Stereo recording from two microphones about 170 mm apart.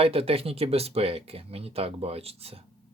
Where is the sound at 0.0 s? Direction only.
35° right (ahead or behind).